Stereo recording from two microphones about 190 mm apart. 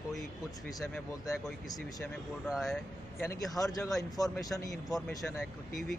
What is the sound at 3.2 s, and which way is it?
Speech, 15° left (ahead or behind).